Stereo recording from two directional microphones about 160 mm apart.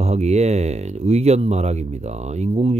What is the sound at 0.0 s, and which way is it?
Speech, 45° right (ahead or behind).